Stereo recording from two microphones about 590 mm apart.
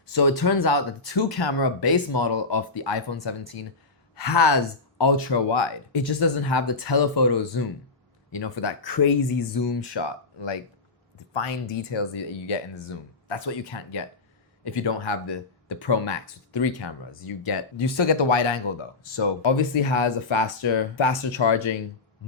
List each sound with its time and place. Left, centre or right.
0.1 s speech: left
11.3 s speech: left